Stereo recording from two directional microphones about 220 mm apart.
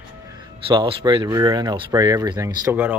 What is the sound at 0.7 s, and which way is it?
Speech, 20° right (ahead or behind).